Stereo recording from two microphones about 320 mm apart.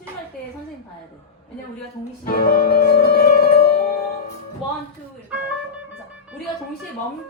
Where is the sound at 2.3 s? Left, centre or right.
Left.